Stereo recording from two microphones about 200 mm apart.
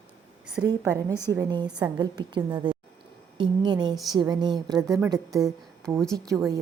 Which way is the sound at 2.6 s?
25° right (ahead or behind).